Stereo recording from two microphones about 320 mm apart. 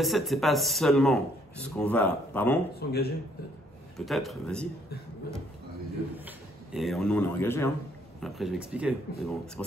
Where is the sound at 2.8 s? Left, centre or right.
Left.